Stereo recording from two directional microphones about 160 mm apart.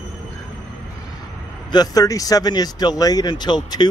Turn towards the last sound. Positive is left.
turn(degrees=25)  # may be behind; listen again after turning